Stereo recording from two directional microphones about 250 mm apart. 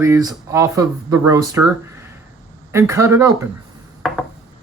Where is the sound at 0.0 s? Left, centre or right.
Centre.